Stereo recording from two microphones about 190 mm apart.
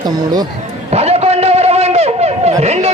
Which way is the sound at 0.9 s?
35° right (ahead or behind).